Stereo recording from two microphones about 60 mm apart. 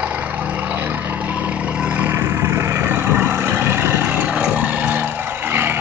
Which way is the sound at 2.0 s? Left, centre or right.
Right.